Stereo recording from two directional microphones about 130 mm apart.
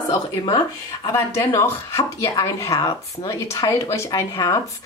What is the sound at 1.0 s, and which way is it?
Speech, 20° left (ahead or behind).